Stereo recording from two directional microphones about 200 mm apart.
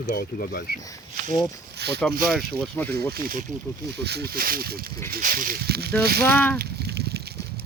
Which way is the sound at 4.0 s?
55° right (ahead or behind).